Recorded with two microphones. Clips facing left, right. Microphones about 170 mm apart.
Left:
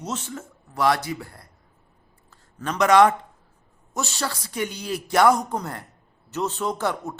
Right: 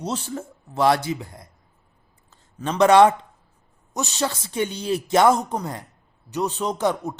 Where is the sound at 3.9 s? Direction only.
20° right (ahead or behind).